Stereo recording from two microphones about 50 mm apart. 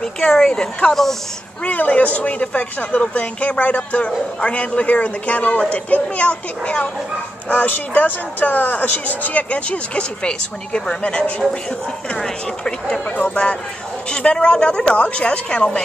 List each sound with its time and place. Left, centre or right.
0.0 s speech: centre
1.6 s speech: left
7.4 s speech: left
12.2 s speech: centre
13.1 s speech: left